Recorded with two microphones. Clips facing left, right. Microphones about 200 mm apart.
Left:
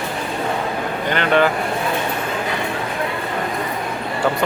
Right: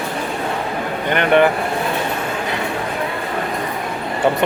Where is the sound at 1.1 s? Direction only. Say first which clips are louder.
Right 3 dB; 15° right (ahead or behind).